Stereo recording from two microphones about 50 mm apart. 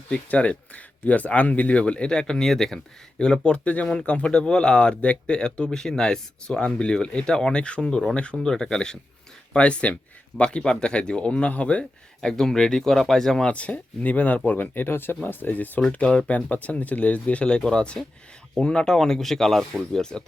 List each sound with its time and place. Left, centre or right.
0.3 s speech: left
12.2 s speech: centre
13.5 s speech: left
15.9 s speech: left